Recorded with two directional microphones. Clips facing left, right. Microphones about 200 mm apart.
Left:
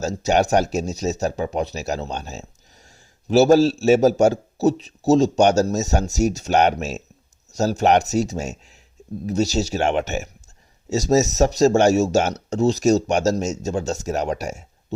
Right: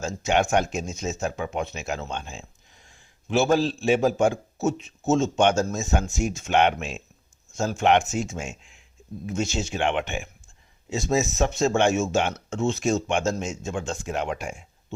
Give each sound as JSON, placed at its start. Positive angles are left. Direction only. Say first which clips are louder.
{"t": 0.0, "sound": "speech", "louder": "left 4 dB", "side_deg": 40}